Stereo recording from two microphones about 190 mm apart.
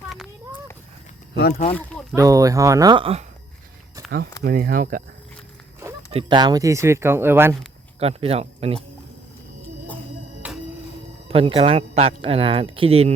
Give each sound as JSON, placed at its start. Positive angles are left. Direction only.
{"t": 1.7, "sound": "speech", "side_deg": 5}
{"t": 2.1, "sound": "speech", "side_deg": -15}
{"t": 4.4, "sound": "speech", "side_deg": -50}
{"t": 6.1, "sound": "speech", "side_deg": -25}
{"t": 7.9, "sound": "speech", "side_deg": -30}
{"t": 10.4, "sound": "music", "side_deg": -5}
{"t": 11.3, "sound": "speech", "side_deg": -30}